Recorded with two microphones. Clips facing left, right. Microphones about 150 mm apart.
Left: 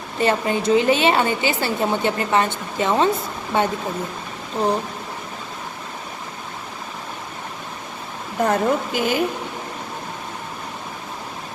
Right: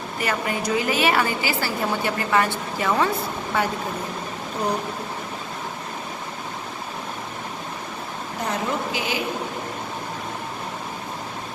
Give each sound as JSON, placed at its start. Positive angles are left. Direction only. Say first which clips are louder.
{"t": 0.2, "sound": "a woman's voice", "louder": "left 6 dB", "side_deg": 25}
{"t": 8.4, "sound": "speech", "louder": "left 6 dB", "side_deg": 50}